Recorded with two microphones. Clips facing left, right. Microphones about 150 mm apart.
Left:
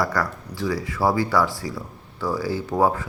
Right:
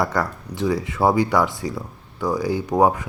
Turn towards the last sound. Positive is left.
turn(degrees=-15)  # may be behind; listen again after turning